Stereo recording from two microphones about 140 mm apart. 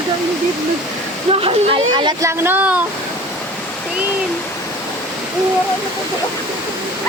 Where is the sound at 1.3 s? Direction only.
40° right (ahead or behind).